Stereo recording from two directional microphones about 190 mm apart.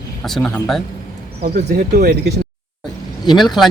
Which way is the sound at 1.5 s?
55° right (ahead or behind).